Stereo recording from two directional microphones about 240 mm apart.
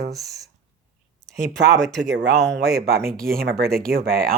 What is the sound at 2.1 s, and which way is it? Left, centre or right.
Speech, right.